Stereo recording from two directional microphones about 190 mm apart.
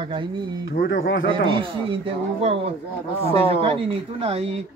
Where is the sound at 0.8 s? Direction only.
75° left (ahead or behind).